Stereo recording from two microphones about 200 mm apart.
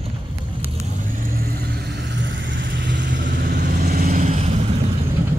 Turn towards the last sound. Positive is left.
turn(degrees=-35)  # may be behind; listen again after turning